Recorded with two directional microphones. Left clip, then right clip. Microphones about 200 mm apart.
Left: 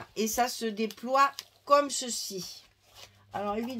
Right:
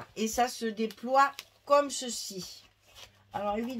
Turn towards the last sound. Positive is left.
turn(degrees=40)  # may be behind; listen again after turning